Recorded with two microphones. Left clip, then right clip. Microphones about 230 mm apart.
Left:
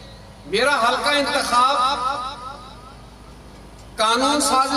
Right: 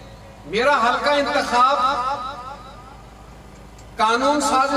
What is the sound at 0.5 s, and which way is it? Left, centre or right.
A man's voice, left.